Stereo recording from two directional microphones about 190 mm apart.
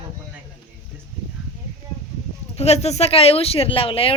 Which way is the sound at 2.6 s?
35° left (ahead or behind).